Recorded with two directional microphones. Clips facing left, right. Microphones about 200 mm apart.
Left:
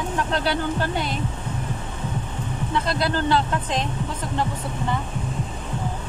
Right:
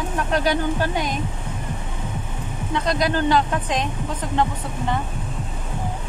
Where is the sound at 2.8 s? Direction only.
15° right (ahead or behind).